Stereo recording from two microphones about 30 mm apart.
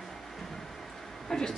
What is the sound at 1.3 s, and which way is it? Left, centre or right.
Speech, centre.